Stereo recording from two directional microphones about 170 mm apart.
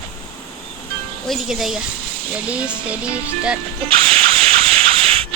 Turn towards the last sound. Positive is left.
turn(degrees=-35)  # may be behind; listen again after turning